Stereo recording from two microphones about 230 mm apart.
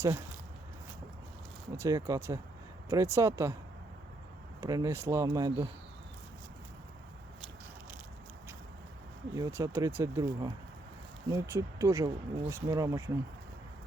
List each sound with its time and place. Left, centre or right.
0.0 s speech: centre
1.7 s speech: centre
4.6 s speech: centre
9.3 s speech: centre